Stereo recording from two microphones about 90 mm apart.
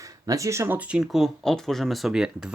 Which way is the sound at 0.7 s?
10° right (ahead or behind).